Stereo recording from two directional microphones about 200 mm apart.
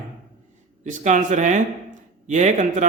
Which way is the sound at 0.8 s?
40° right (ahead or behind).